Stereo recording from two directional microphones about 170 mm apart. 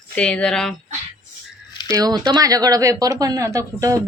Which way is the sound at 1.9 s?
25° right (ahead or behind).